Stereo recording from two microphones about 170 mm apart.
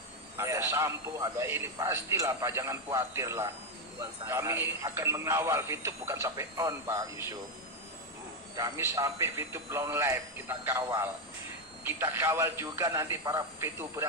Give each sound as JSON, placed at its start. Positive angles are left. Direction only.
{"t": 0.3, "sound": "a man's voice", "side_deg": -15}
{"t": 8.5, "sound": "a man's voice", "side_deg": -20}